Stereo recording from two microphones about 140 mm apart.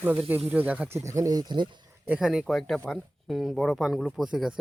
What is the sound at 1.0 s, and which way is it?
Speech, 20° right (ahead or behind).